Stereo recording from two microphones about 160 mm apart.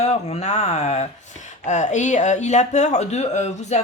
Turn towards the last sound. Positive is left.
turn(degrees=45)  # may be behind; listen again after turning